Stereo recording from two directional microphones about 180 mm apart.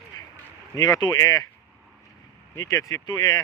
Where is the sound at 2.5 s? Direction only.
20° left (ahead or behind).